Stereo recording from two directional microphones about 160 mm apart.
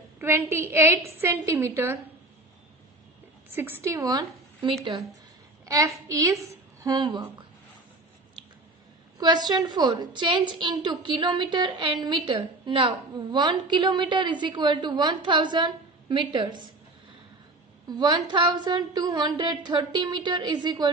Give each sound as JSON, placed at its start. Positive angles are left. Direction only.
{"t": 0.2, "sound": "a woman's voice", "side_deg": -15}
{"t": 3.5, "sound": "a woman's voice", "side_deg": -15}
{"t": 9.5, "sound": "a woman's voice", "side_deg": -25}
{"t": 17.8, "sound": "a woman's voice", "side_deg": -25}